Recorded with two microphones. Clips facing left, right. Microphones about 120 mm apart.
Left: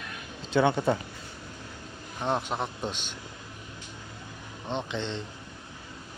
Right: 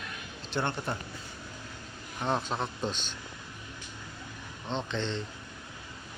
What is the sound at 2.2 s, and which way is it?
Speech, 15° left (ahead or behind).